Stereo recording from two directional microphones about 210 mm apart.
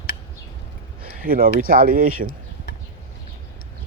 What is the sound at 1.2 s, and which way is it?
Speech, 40° right (ahead or behind).